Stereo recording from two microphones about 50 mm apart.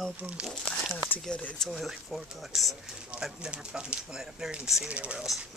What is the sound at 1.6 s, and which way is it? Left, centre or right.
Speech, centre.